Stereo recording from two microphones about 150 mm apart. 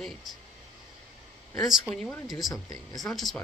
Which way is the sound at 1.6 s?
Centre (ahead or behind).